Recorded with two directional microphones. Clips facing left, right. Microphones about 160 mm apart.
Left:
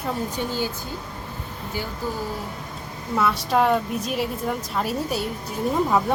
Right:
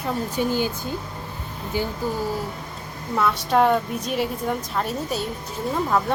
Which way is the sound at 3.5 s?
Centre (ahead or behind).